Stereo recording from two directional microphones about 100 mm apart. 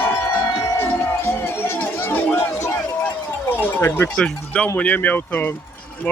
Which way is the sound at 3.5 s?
20° left (ahead or behind).